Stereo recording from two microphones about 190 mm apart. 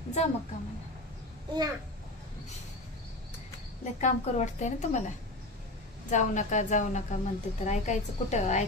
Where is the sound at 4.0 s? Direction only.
40° left (ahead or behind).